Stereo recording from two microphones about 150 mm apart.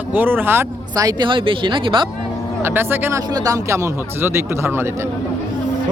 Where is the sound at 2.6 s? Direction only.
15° right (ahead or behind).